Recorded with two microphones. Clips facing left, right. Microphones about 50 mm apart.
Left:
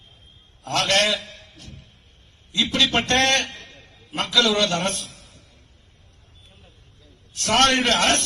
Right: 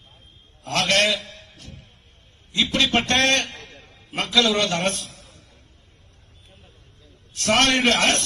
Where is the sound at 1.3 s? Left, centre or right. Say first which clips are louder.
Even; right.